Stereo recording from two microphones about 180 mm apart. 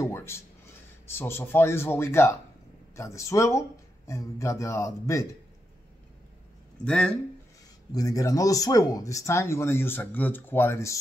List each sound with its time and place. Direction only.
0.0 s a sound: 15° left (ahead or behind)
1.0 s speech: 15° left (ahead or behind)
6.8 s speech: 5° left (ahead or behind)
7.9 s speech: 20° left (ahead or behind)